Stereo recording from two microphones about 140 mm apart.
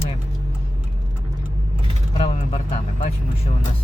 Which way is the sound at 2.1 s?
50° left (ahead or behind).